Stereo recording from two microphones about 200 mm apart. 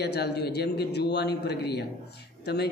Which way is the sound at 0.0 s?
55° left (ahead or behind).